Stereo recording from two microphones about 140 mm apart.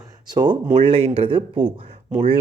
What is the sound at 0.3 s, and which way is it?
Speech, 30° right (ahead or behind).